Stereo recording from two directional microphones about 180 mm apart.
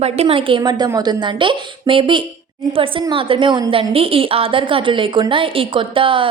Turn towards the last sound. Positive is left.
turn(degrees=-30)  # may be behind; listen again after turning